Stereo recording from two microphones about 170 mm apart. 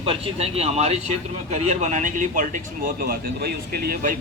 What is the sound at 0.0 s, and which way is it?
Speech, 35° right (ahead or behind).